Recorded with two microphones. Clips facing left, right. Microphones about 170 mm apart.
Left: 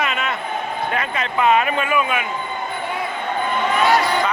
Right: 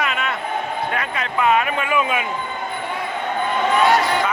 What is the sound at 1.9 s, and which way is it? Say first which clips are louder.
Speech: even; 20° right (ahead or behind).